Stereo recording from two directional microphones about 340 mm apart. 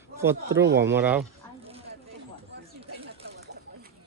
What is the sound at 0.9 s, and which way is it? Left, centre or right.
Speech, centre.